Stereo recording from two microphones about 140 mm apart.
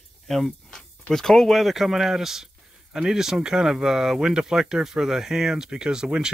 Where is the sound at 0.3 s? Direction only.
Centre (ahead or behind).